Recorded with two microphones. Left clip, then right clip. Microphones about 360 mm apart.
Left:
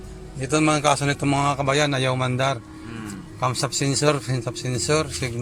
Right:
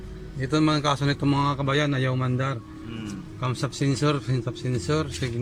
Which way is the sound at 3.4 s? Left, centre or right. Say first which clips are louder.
Left 5 dB; centre.